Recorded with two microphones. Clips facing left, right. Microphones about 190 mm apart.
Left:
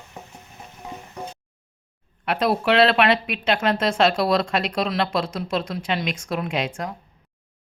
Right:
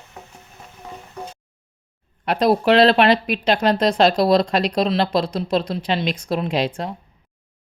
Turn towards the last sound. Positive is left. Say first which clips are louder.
# right 4 dB
turn(degrees=-35)  # may be behind; listen again after turning